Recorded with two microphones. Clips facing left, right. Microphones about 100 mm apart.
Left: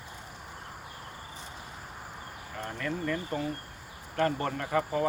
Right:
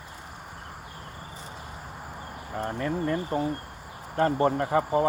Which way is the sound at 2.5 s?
30° right (ahead or behind).